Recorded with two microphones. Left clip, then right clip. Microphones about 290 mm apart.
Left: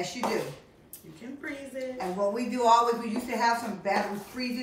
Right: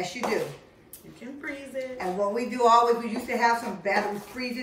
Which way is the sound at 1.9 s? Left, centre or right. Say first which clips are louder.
Right 2 dB; centre.